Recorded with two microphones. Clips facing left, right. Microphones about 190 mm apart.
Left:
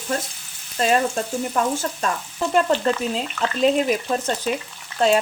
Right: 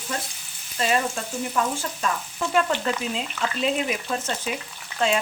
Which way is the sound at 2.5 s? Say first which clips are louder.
Left 4 dB; 40° left (ahead or behind).